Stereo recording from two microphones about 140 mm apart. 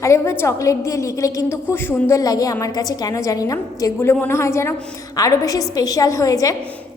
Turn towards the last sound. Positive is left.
turn(degrees=25)  # may be behind; listen again after turning